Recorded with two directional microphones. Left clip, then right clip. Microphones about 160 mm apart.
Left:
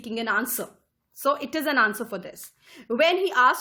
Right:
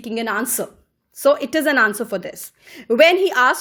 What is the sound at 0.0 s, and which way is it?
A woman's voice, 25° right (ahead or behind).